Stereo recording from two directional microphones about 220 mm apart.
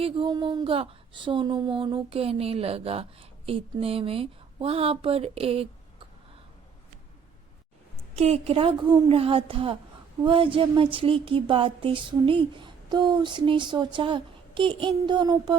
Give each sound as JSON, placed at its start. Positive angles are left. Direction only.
{"t": 0.0, "sound": "speech", "side_deg": -20}
{"t": 8.1, "sound": "speech", "side_deg": -30}